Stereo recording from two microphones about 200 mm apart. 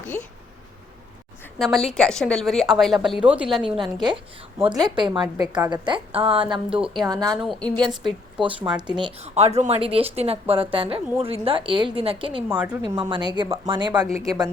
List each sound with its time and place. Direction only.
1.5 s a woman's voice: centre (ahead or behind)
4.8 s speech: 20° right (ahead or behind)
6.7 s a woman's voice: 5° right (ahead or behind)
7.0 s speech: 20° right (ahead or behind)
7.3 s a woman's voice: centre (ahead or behind)
7.8 s speech: 20° right (ahead or behind)
12.5 s a woman's voice: 5° right (ahead or behind)
12.9 s speech: 25° right (ahead or behind)